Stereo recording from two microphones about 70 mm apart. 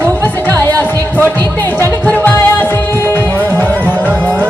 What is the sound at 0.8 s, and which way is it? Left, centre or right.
Music, left.